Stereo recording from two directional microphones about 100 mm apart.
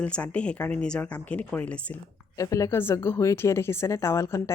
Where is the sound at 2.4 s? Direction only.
35° left (ahead or behind).